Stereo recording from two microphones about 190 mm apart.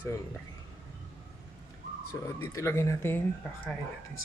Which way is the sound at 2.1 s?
15° left (ahead or behind).